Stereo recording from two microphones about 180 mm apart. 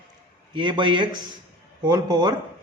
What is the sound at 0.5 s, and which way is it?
A man's voice, 25° right (ahead or behind).